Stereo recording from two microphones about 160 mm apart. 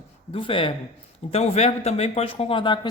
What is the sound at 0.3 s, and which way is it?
Speech, 35° left (ahead or behind).